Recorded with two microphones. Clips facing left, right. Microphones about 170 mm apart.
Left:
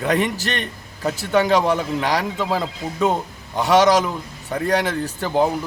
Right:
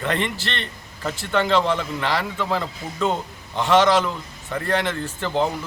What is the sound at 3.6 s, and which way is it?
Speech, 40° left (ahead or behind).